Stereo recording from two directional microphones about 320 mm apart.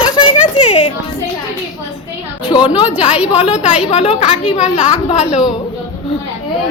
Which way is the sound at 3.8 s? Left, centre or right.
Centre.